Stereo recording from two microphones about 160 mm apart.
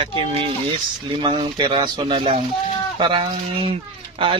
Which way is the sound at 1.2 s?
30° right (ahead or behind).